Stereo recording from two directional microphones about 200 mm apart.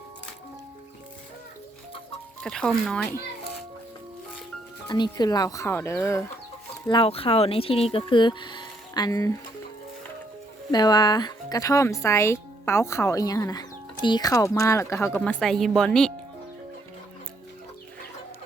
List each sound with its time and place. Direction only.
2.4 s speech: centre (ahead or behind)
4.9 s speech: 20° left (ahead or behind)
6.8 s speech: 25° left (ahead or behind)
10.7 s speech: 20° left (ahead or behind); by 16.1 s 5° left (ahead or behind)